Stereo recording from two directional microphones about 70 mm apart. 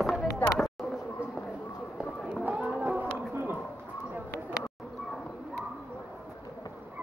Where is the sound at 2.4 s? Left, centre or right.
Right.